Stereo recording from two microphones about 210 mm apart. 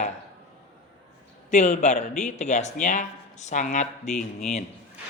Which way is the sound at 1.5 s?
35° left (ahead or behind).